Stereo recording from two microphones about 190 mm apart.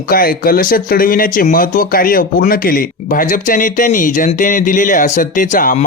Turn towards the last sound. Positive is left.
turn(degrees=45)  # may be behind; listen again after turning